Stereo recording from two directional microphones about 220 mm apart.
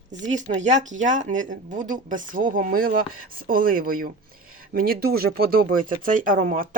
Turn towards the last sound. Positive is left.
turn(degrees=-40)  # may be behind; listen again after turning